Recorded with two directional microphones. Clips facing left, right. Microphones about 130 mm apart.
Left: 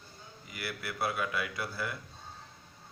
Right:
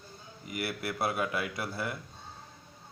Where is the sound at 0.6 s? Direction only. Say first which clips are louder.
Right 2 dB; 30° right (ahead or behind).